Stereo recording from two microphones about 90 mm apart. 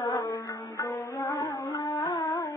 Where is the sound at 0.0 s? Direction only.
45° left (ahead or behind).